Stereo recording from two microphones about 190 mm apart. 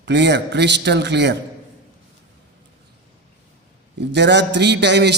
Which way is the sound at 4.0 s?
65° right (ahead or behind).